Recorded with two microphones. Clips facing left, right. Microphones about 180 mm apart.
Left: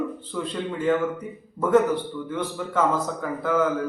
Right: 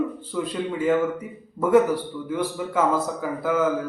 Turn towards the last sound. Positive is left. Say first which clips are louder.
# even
turn(degrees=-5)  # may be behind; listen again after turning